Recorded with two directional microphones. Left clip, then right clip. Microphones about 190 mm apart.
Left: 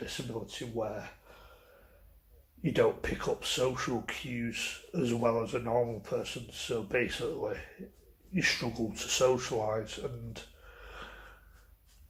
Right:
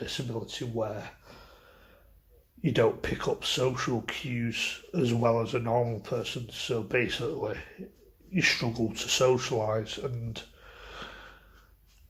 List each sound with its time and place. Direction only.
0.0 s speech: 35° right (ahead or behind)
2.6 s speech: 35° right (ahead or behind)